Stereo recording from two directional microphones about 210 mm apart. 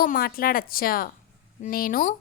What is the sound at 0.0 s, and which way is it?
A woman's voice, 45° left (ahead or behind).